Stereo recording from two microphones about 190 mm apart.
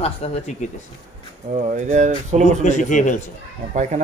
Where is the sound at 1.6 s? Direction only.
40° right (ahead or behind).